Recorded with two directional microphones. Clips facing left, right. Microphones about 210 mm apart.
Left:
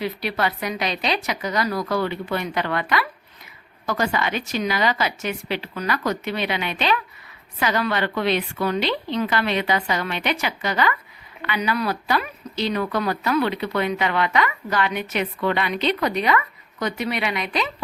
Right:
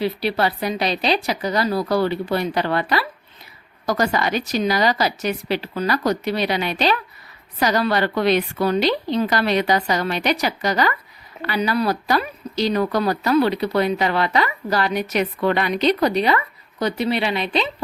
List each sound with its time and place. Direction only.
0.0 s speech: 30° right (ahead or behind)